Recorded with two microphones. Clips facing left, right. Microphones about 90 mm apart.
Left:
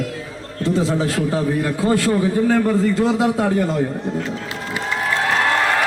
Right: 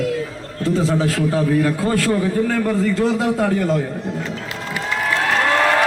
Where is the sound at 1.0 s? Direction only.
20° left (ahead or behind).